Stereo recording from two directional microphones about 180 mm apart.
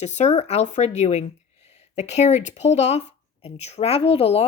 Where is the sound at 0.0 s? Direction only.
40° left (ahead or behind).